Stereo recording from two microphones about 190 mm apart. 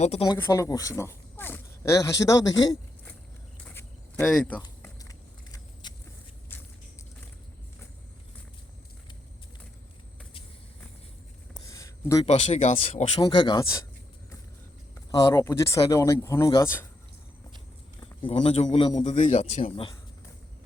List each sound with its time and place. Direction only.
0.0 s a man's voice: 35° left (ahead or behind)
0.3 s speech: 15° left (ahead or behind)
3.6 s a sound: 10° left (ahead or behind)
4.3 s speech: 5° left (ahead or behind)
4.8 s biting: 20° left (ahead or behind)
6.5 s vehicle: 10° left (ahead or behind)
11.5 s a sound: 15° left (ahead or behind)
12.2 s speech: 35° left (ahead or behind)
15.1 s speech: 15° left (ahead or behind)
18.0 s a man's voice: 30° left (ahead or behind)